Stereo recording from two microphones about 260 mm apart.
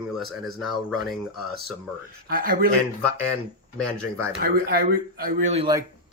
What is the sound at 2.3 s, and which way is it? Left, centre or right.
Speech, right.